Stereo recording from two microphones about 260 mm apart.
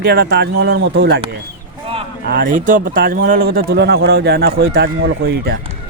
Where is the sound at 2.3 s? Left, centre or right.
Right.